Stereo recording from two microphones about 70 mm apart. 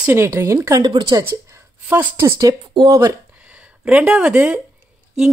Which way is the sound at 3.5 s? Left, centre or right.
Right.